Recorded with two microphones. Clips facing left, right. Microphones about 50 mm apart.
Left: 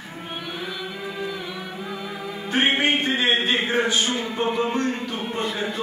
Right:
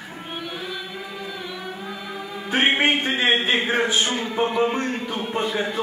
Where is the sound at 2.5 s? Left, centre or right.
Centre.